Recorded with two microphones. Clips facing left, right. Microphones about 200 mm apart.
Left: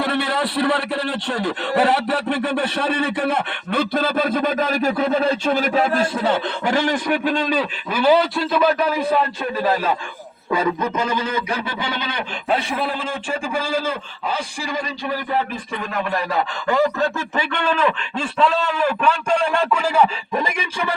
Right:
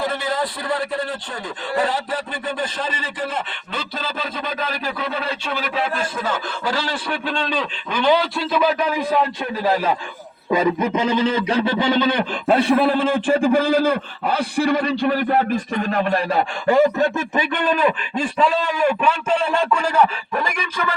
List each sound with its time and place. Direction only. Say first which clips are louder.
0.0 s speech: left 2 dB; 65° left (ahead or behind); by 6.4 s 35° left (ahead or behind)
6.7 s a man's voice: left 5 dB; 15° left (ahead or behind); by 9.0 s centre (ahead or behind)
10.5 s speech: right 2 dB; 20° right (ahead or behind)
11.8 s a man's voice: right 8 dB; 45° right (ahead or behind); by 20.4 s 10° left (ahead or behind)
20.4 s speech: right 2 dB; 25° left (ahead or behind)